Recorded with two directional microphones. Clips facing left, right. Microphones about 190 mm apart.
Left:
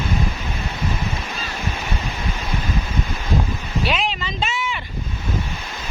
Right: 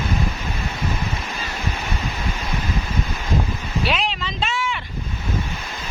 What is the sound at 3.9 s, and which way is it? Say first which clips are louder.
Vehicle: left 1 dB; centre (ahead or behind).